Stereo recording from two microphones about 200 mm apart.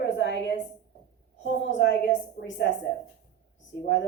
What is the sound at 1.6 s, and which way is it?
A woman's voice, 65° left (ahead or behind).